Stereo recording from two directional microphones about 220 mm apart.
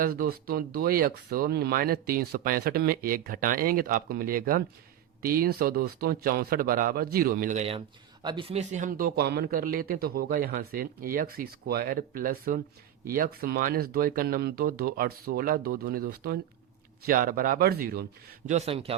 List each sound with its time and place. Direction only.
0.0 s speech: 40° right (ahead or behind)
8.2 s speech: 20° right (ahead or behind); by 18.0 s 45° right (ahead or behind)
18.4 s a man's voice: 30° right (ahead or behind)